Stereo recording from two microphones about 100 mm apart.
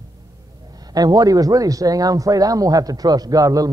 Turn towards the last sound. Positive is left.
turn(degrees=-40)  # may be behind; listen again after turning